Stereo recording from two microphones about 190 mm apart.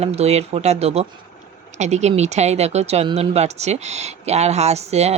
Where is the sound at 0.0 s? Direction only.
35° right (ahead or behind).